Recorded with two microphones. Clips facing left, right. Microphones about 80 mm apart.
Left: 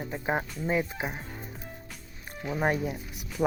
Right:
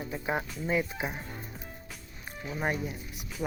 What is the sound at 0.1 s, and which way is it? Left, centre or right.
Speech, left.